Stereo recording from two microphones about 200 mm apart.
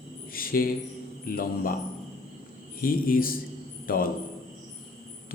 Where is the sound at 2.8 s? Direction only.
45° left (ahead or behind).